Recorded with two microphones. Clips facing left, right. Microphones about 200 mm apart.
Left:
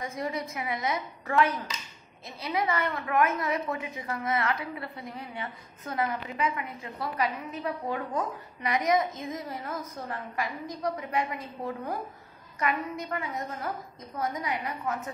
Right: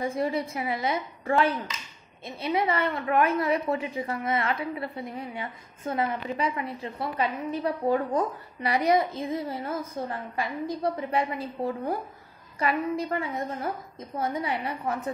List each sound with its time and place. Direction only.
0.0 s a woman's voice: 30° right (ahead or behind)